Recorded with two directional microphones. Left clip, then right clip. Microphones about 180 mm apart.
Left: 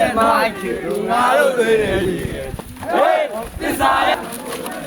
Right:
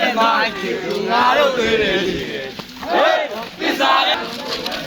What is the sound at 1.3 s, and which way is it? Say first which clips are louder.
Speech: left 1 dB; 50° left (ahead or behind).